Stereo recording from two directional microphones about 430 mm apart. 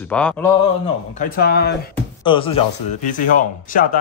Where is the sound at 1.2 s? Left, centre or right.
Left.